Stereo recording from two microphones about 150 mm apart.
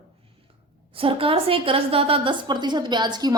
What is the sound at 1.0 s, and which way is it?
A woman's voice, 40° right (ahead or behind).